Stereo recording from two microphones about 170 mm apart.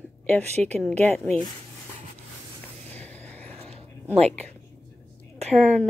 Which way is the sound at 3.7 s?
35° right (ahead or behind).